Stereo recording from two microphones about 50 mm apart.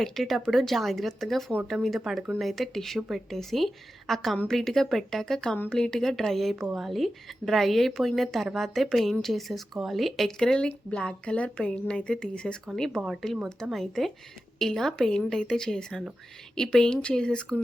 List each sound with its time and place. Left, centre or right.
0.0 s a woman's voice: centre
10.4 s speech: centre
12.6 s a woman's voice: centre
14.7 s speech: centre